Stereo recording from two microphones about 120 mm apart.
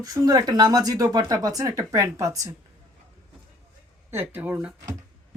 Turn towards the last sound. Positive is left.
turn(degrees=-15)  # may be behind; listen again after turning